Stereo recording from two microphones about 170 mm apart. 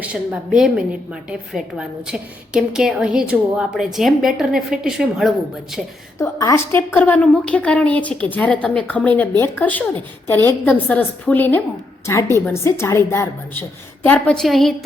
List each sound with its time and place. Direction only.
0.0 s a woman's voice: 10° right (ahead or behind)
6.1 s a woman's voice: 15° left (ahead or behind); by 14.8 s centre (ahead or behind)